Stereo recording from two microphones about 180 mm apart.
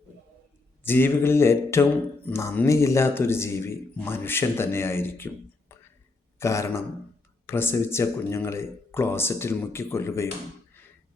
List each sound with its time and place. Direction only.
0.8 s speech: 10° left (ahead or behind)